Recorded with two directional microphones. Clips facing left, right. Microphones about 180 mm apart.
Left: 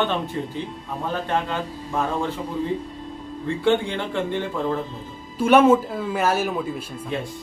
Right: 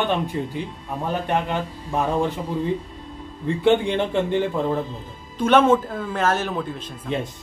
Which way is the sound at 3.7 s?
20° right (ahead or behind).